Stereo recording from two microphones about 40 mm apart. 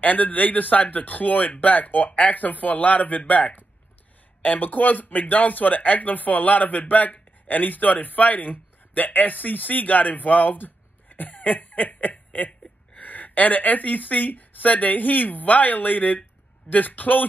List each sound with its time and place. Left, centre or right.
0.0 s speech: left